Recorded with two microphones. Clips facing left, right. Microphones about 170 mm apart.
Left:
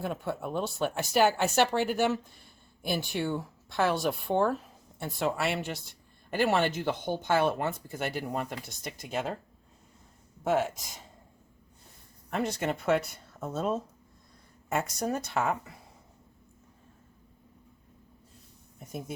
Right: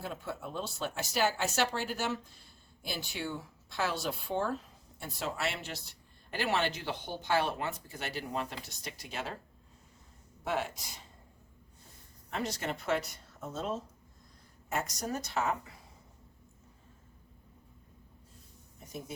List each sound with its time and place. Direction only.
0.0 s speech: 55° left (ahead or behind)
10.4 s speech: 45° left (ahead or behind)
12.3 s speech: 55° left (ahead or behind)